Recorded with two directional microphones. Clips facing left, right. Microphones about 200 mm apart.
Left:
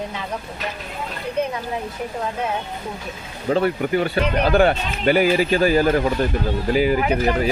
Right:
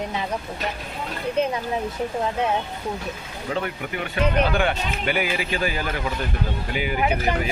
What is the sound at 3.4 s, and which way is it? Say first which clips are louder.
Speech: left 8 dB; 35° left (ahead or behind).